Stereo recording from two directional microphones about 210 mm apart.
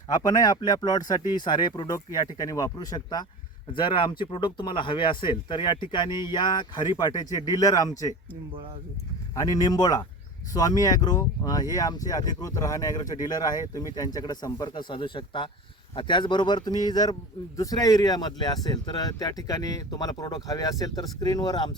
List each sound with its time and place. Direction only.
0.1 s speech: 20° left (ahead or behind)
9.3 s speech: 15° left (ahead or behind)